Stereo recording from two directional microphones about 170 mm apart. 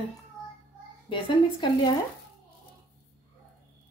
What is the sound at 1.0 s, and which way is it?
Speech, 25° left (ahead or behind).